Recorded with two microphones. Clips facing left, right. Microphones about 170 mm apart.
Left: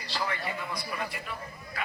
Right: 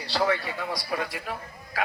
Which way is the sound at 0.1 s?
75° right (ahead or behind).